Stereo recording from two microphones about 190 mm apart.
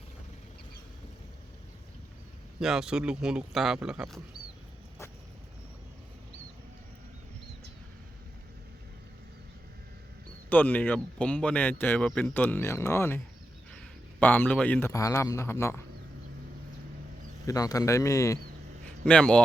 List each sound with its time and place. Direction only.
2.6 s speech: 5° right (ahead or behind)
10.5 s speech: 10° left (ahead or behind)
17.4 s speech: 20° left (ahead or behind)
19.0 s speech: 5° left (ahead or behind)